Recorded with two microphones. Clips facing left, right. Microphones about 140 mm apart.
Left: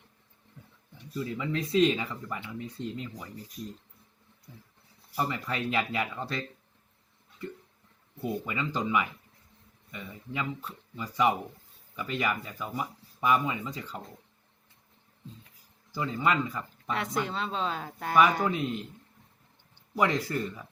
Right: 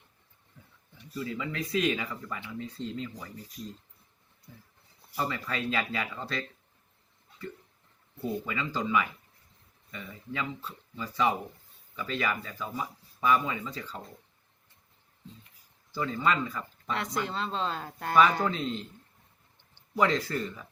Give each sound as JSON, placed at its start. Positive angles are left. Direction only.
{"t": 1.3, "sound": "speech", "side_deg": 25}
{"t": 5.1, "sound": "speech", "side_deg": 20}
{"t": 8.2, "sound": "speech", "side_deg": 15}
{"t": 15.9, "sound": "speech", "side_deg": 15}
{"t": 16.9, "sound": "speech", "side_deg": 0}
{"t": 20.0, "sound": "speech", "side_deg": 15}